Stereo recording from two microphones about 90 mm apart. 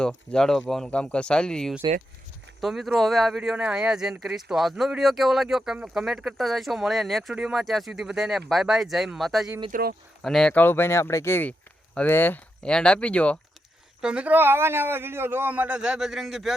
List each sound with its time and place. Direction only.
0.3 s speech: 5° left (ahead or behind)
3.5 s a man's voice: 15° right (ahead or behind)
7.3 s a man's voice: 10° right (ahead or behind)
7.6 s speech: centre (ahead or behind)
10.5 s speech: 25° left (ahead or behind)
12.6 s speech: 10° left (ahead or behind)
14.0 s a man's voice: 10° right (ahead or behind)